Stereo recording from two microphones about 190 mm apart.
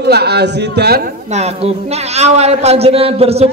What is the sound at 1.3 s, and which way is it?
A man's voice, 35° right (ahead or behind).